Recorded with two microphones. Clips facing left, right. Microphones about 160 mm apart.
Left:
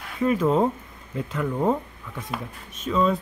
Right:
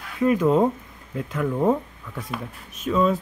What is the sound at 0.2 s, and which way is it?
Speech, centre (ahead or behind).